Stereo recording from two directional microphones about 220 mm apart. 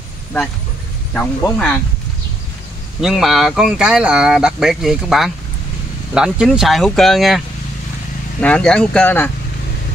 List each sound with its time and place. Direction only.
1.1 s speech: 5° left (ahead or behind)
3.0 s speech: centre (ahead or behind)